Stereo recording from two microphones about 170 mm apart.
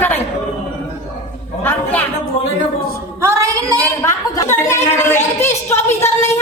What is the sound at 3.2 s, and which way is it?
Singing, 15° right (ahead or behind).